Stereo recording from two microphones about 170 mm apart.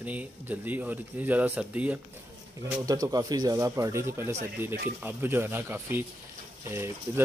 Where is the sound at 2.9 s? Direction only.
20° right (ahead or behind).